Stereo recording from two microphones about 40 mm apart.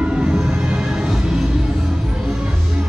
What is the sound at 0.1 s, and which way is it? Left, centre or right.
Music, right.